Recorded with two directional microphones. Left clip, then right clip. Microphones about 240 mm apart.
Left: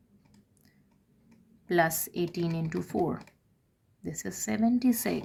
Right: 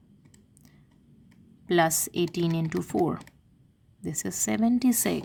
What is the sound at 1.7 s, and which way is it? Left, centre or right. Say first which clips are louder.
Speech: right 3 dB; right.